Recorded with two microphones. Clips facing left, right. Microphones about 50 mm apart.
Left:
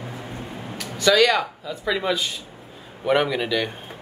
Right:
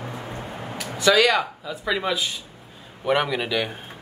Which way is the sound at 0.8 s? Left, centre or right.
Centre.